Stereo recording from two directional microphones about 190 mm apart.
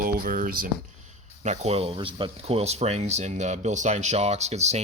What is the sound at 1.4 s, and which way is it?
Speech, 35° right (ahead or behind).